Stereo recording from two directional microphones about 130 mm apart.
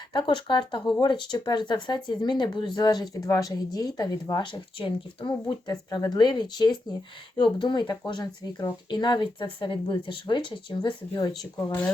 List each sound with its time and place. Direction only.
0.1 s speech: 40° left (ahead or behind)